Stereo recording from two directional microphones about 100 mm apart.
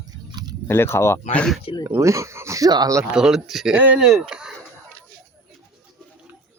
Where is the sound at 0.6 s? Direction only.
25° left (ahead or behind).